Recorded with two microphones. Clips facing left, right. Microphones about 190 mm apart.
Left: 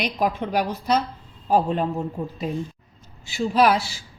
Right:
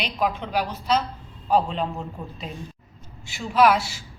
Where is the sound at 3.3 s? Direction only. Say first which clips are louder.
Even; 35° left (ahead or behind).